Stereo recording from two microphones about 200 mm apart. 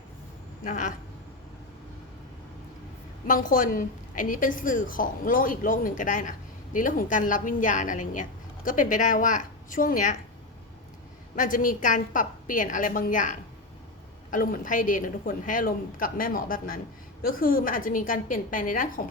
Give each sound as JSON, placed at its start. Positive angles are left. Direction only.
{"t": 0.6, "sound": "a woman's voice", "side_deg": 40}
{"t": 3.2, "sound": "a woman's voice", "side_deg": 40}
{"t": 11.3, "sound": "a woman's voice", "side_deg": 40}